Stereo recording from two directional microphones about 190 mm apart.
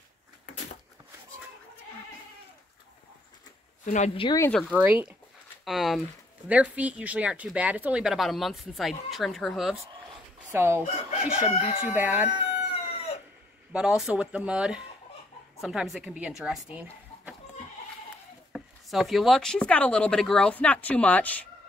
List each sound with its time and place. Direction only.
3.8 s speech: 40° left (ahead or behind)
4.4 s speech: 5° left (ahead or behind)
4.6 s speech: 10° right (ahead or behind)
10.5 s speech: 10° right (ahead or behind)
10.9 s speech: 35° left (ahead or behind)
11.9 s speech: 10° right (ahead or behind)
13.7 s speech: 5° right (ahead or behind)
16.7 s a sound: 10° right (ahead or behind)
18.5 s speech: centre (ahead or behind)